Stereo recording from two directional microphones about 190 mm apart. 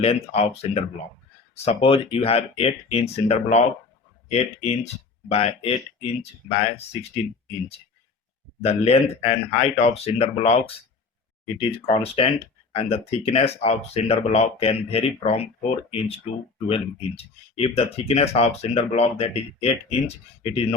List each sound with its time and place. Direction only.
0.0 s speech: 30° left (ahead or behind)
8.6 s speech: 30° left (ahead or behind)